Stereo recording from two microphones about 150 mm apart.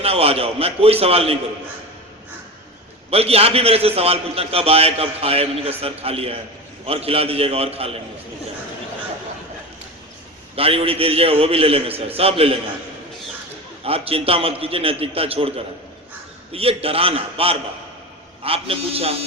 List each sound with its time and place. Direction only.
0.0 s a man's voice: 40° right (ahead or behind)
3.1 s a man's voice: 40° right (ahead or behind)
10.5 s a man's voice: 40° right (ahead or behind)
13.8 s a man's voice: 40° right (ahead or behind)